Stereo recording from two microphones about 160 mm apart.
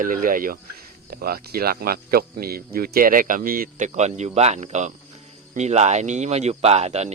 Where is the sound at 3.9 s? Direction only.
45° right (ahead or behind).